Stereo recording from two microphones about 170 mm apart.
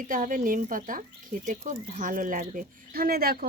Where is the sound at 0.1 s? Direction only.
50° right (ahead or behind).